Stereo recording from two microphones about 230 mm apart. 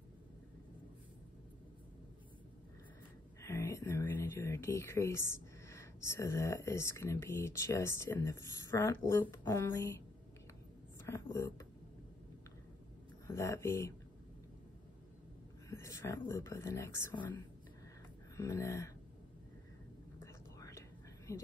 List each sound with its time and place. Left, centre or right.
3.4 s speech: centre
11.1 s speech: centre
13.3 s speech: centre
15.7 s speech: centre
18.3 s a sound: centre
20.5 s whispering: centre
21.3 s speech: centre